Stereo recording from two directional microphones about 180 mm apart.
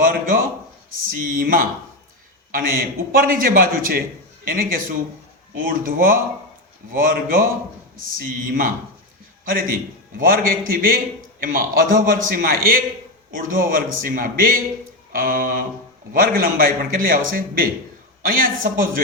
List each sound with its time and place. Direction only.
0.0 s a man's voice: 50° right (ahead or behind)